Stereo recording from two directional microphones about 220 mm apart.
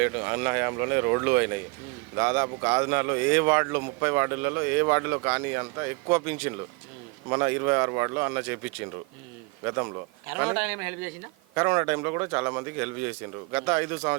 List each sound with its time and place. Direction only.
0.0 s speech: 10° right (ahead or behind)
9.6 s speech: 15° right (ahead or behind)